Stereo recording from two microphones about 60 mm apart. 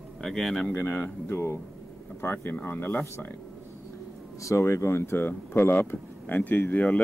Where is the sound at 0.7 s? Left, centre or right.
Left.